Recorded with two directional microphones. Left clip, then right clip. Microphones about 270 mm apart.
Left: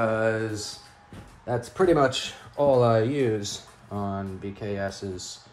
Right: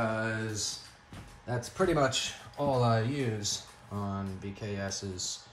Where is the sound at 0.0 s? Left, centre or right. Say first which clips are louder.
Left 8 dB; centre.